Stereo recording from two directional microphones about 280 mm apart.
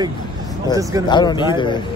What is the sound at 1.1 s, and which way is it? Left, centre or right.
Speech, centre.